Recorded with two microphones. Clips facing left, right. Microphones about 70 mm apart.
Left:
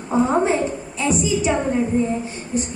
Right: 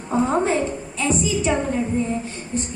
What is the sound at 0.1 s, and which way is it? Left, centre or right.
A woman's voice, centre.